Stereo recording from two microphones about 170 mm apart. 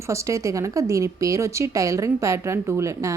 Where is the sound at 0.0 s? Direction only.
15° right (ahead or behind).